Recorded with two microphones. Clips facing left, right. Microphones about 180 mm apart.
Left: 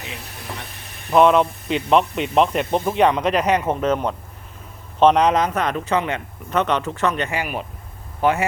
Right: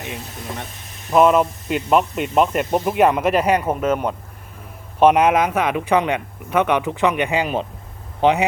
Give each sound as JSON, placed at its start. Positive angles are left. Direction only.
{"t": 1.1, "sound": "a man's voice", "side_deg": -5}